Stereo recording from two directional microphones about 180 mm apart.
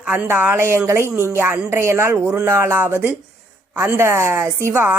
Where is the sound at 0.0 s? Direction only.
10° right (ahead or behind).